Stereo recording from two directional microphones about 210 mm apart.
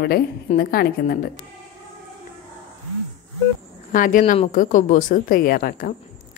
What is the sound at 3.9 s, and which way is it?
A woman's voice, 40° left (ahead or behind).